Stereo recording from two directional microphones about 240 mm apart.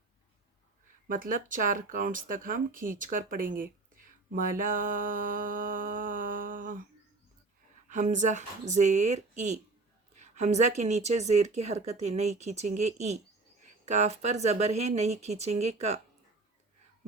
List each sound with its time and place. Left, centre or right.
1.0 s speech: right
7.9 s speech: right